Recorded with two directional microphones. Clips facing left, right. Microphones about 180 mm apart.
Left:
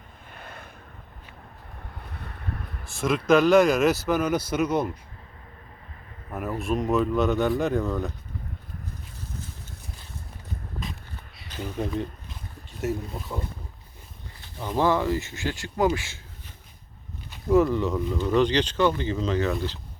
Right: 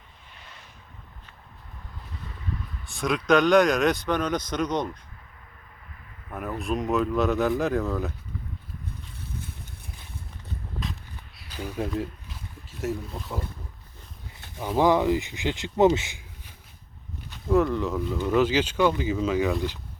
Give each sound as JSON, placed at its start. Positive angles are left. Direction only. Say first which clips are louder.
{"t": 0.3, "sound": "a sound", "louder": "left 8 dB", "side_deg": 55}
{"t": 2.0, "sound": "a sound", "louder": "even", "side_deg": 60}
{"t": 2.9, "sound": "speech", "louder": "left 1 dB", "side_deg": 0}
{"t": 6.6, "sound": "speech", "louder": "left 1 dB", "side_deg": 0}
{"t": 11.3, "sound": "speech", "louder": "even", "side_deg": -10}
{"t": 14.6, "sound": "speech", "louder": "right 2 dB", "side_deg": -10}
{"t": 17.3, "sound": "speech", "louder": "left 2 dB", "side_deg": 0}